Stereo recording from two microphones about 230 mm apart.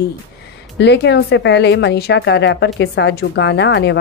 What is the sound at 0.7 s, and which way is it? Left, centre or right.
A woman's voice, left.